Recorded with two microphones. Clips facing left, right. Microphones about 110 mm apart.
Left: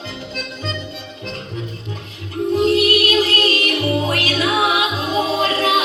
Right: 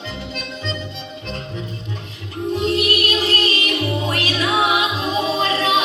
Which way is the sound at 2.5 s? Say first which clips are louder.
Left 5 dB; 40° left (ahead or behind).